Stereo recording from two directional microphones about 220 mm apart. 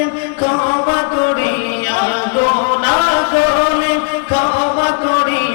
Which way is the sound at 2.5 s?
15° left (ahead or behind).